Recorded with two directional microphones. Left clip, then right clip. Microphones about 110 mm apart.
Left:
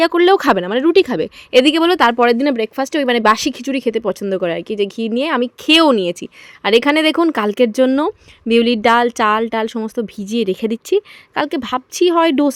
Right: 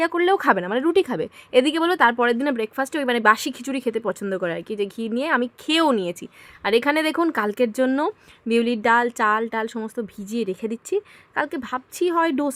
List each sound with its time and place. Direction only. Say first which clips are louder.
0.0 s speech: left 8 dB; 55° left (ahead or behind)
0.6 s speech: left 7 dB; 45° left (ahead or behind)
3.0 s speech: left 5 dB; 50° left (ahead or behind)
3.7 s speech: left 5 dB; 35° left (ahead or behind)
9.7 s speech: left 7 dB; 35° left (ahead or behind)